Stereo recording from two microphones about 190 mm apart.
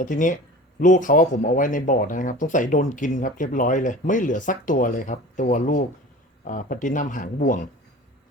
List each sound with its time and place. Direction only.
0.0 s speech: 45° left (ahead or behind)